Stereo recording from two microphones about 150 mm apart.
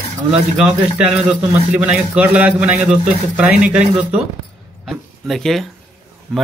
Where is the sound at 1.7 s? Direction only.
10° right (ahead or behind).